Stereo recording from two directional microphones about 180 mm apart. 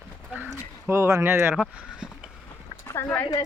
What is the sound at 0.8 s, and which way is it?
Speech, 15° right (ahead or behind).